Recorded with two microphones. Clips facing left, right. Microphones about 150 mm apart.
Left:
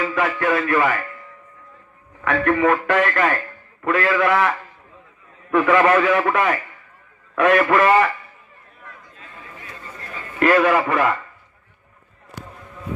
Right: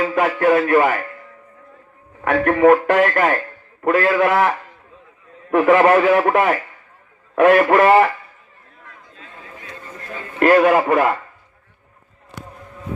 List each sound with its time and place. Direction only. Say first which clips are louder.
0.0 s speech: right 4 dB; 40° right (ahead or behind)
2.2 s speech: right 5 dB; 45° right (ahead or behind)
10.4 s speech: right 3 dB; 45° right (ahead or behind)